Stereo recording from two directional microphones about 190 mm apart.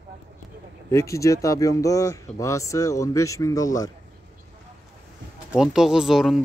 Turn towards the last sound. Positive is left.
turn(degrees=0)  # may be behind; listen again after turning